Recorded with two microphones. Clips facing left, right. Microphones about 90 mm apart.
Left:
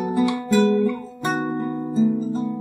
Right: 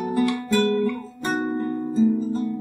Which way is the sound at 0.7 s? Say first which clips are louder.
Left 3 dB; 15° left (ahead or behind).